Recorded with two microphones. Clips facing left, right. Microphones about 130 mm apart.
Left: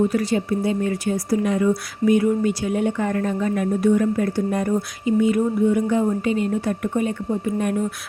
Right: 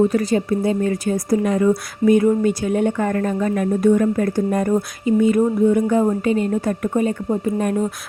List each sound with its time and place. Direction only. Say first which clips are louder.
0.1 s speech: right 3 dB; 45° right (ahead or behind)